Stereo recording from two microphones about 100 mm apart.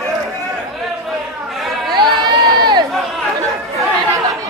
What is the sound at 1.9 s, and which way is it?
Crowd, 50° right (ahead or behind).